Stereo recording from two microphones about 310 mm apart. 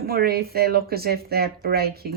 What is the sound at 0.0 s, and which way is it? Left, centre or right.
Speech, right.